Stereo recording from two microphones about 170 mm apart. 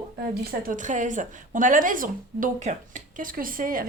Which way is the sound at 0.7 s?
50° right (ahead or behind).